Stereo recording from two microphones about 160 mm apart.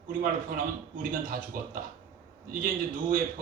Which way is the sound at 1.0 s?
60° right (ahead or behind).